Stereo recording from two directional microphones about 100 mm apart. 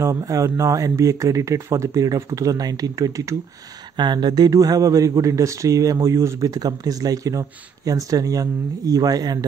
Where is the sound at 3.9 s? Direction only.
50° right (ahead or behind).